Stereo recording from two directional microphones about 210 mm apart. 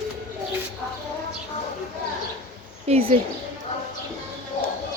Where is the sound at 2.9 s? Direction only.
30° right (ahead or behind).